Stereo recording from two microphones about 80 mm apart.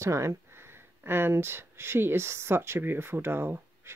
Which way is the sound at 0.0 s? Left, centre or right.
Right.